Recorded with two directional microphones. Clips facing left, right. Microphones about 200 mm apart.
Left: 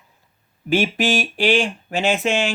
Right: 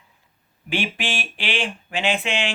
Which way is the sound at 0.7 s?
40° left (ahead or behind).